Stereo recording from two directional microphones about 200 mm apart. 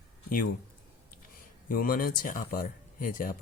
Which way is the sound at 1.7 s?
45° left (ahead or behind).